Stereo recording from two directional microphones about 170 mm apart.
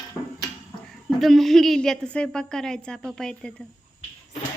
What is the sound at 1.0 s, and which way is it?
A woman's voice, centre (ahead or behind).